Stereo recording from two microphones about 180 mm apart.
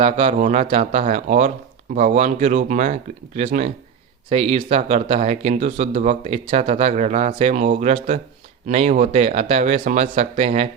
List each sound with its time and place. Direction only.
0.0 s speech: 30° right (ahead or behind)